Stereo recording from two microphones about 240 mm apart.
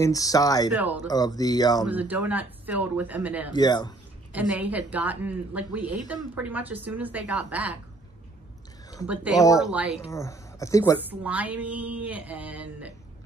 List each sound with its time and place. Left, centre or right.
0.0 s speech: centre
1.9 s a woman's voice: centre
3.5 s speech: centre
4.3 s a woman's voice: centre
9.0 s speech: centre
10.1 s speech: centre
11.0 s a woman's voice: centre